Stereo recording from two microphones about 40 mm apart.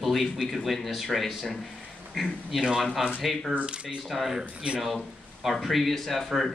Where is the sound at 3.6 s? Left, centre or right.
Right.